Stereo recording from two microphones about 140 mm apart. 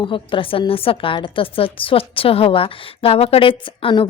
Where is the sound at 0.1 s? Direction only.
40° left (ahead or behind).